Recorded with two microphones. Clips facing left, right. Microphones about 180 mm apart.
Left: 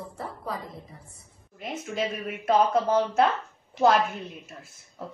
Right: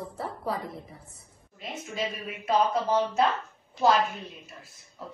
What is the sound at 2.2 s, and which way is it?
Speech, 55° left (ahead or behind).